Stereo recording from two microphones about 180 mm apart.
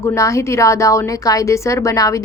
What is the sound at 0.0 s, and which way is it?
A woman's voice, 15° left (ahead or behind).